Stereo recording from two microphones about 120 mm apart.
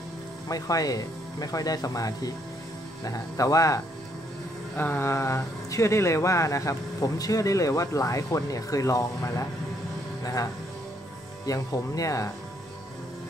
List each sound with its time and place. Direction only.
0.5 s speech: 30° left (ahead or behind)
4.7 s speech: 15° left (ahead or behind)